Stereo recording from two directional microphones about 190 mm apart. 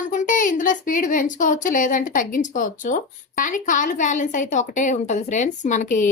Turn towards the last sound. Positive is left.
turn(degrees=40)  # may be behind; listen again after turning